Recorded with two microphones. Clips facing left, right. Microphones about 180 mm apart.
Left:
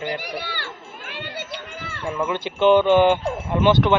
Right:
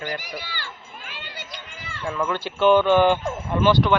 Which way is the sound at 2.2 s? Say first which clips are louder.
Left 1 dB; 20° left (ahead or behind).